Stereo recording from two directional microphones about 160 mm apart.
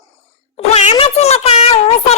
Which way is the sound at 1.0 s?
40° left (ahead or behind).